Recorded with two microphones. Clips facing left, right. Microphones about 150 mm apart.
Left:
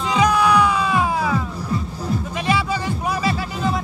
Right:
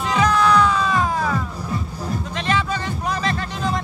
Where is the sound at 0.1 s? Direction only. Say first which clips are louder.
Left 1 dB; 10° left (ahead or behind).